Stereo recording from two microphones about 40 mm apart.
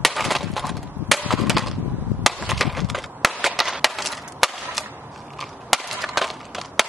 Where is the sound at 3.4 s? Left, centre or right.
Centre.